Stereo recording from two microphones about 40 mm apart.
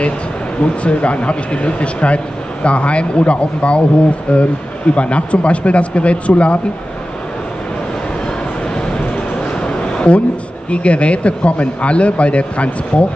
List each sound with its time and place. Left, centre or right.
0.6 s speech: left
8.3 s a sound: left
10.7 s speech: left